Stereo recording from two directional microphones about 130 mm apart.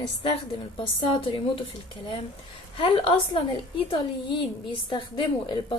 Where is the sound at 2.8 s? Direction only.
45° left (ahead or behind).